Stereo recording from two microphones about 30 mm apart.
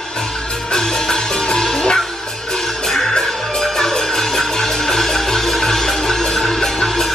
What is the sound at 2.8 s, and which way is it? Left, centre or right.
Music, centre.